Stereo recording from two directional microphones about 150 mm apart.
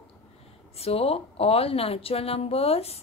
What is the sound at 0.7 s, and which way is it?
Speech, 40° left (ahead or behind).